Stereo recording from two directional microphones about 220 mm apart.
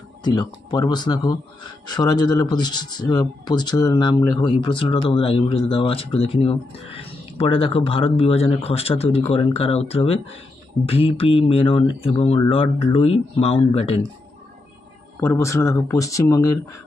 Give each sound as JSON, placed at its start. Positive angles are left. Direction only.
{"t": 0.2, "sound": "speech", "side_deg": 20}
{"t": 15.1, "sound": "speech", "side_deg": 10}